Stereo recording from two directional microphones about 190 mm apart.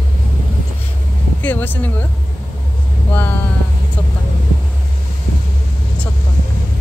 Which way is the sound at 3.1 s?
10° left (ahead or behind).